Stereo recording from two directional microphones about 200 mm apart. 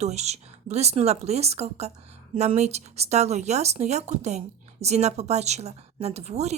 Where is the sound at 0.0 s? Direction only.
35° right (ahead or behind).